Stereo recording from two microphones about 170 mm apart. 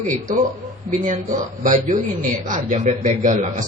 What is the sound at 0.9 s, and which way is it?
A man's voice, 50° right (ahead or behind).